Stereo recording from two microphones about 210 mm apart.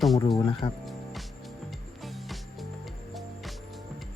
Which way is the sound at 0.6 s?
25° left (ahead or behind).